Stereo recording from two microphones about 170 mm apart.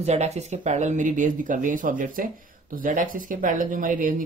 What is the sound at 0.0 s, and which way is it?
Speech, 40° right (ahead or behind).